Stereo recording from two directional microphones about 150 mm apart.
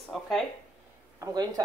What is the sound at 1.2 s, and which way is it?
Speech, 25° right (ahead or behind).